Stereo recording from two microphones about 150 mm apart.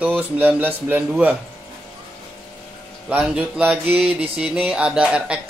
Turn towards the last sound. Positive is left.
turn(degrees=-5)  # may be behind; listen again after turning